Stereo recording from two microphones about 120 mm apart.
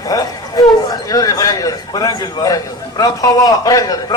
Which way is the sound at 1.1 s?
30° left (ahead or behind).